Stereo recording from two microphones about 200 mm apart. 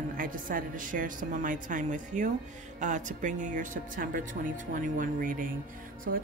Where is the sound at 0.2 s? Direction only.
45° right (ahead or behind).